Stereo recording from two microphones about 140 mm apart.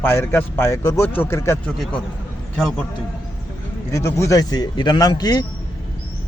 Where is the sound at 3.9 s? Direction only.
20° left (ahead or behind).